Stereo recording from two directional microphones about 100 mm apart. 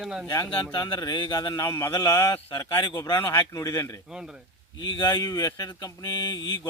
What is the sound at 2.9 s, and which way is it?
Speech, 50° left (ahead or behind).